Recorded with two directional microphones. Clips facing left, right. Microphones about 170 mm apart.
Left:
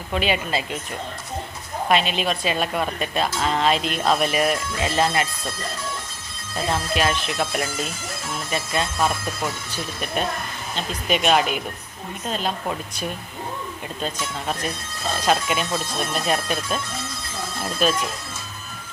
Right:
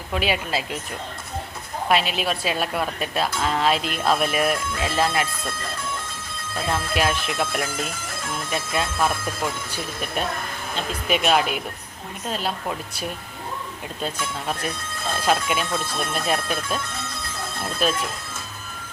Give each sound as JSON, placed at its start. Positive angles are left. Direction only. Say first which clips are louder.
{"t": 0.1, "sound": "speech", "louder": "left 1 dB", "side_deg": -5}
{"t": 1.9, "sound": "speech", "louder": "left 1 dB", "side_deg": -5}
{"t": 6.7, "sound": "speech", "louder": "left 1 dB", "side_deg": -10}
{"t": 7.5, "sound": "speech", "louder": "left 1 dB", "side_deg": -55}
{"t": 8.7, "sound": "speech", "louder": "even", "side_deg": -5}
{"t": 17.8, "sound": "speech", "louder": "left 2 dB", "side_deg": 0}